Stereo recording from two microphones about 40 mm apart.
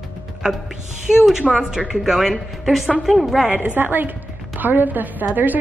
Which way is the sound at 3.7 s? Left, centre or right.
Right.